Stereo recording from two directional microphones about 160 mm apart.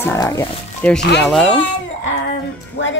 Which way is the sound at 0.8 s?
10° left (ahead or behind).